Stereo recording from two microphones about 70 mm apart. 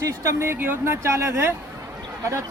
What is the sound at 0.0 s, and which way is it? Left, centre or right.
Speech, right.